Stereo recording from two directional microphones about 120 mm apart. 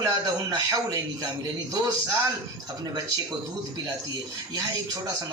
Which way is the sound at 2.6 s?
35° right (ahead or behind).